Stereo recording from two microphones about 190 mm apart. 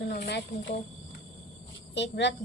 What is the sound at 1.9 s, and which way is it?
Speech, 65° left (ahead or behind).